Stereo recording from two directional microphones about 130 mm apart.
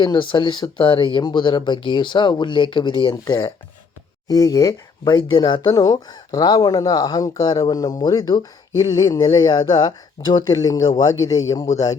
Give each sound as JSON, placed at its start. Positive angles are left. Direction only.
{"t": 0.0, "sound": "speech", "side_deg": 35}
{"t": 4.3, "sound": "speech", "side_deg": 30}